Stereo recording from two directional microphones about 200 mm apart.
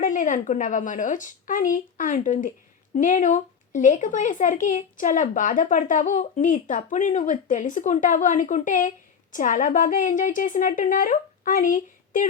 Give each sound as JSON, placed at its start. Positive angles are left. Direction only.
{"t": 0.0, "sound": "speech", "side_deg": 40}